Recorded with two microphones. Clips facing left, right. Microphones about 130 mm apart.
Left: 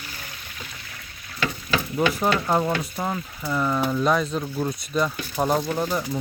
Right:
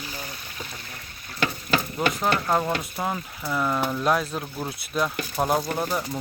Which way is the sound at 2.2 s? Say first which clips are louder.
Right 1 dB; centre (ahead or behind).